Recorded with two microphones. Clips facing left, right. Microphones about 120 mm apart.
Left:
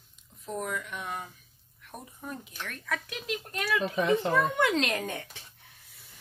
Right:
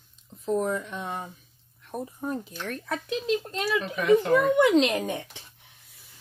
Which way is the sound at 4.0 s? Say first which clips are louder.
Right 6 dB; 25° left (ahead or behind).